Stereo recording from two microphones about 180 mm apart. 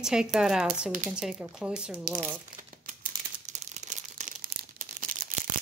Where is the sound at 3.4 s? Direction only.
40° right (ahead or behind).